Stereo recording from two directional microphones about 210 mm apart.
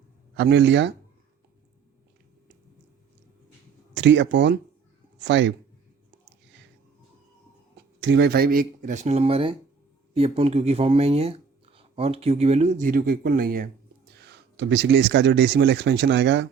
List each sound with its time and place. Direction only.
0.3 s speech: 60° right (ahead or behind)
3.9 s speech: 60° right (ahead or behind)
8.0 s speech: 55° right (ahead or behind)
14.2 s speech: 55° right (ahead or behind)